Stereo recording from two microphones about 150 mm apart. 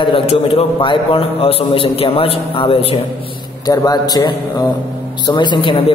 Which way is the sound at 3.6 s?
25° left (ahead or behind).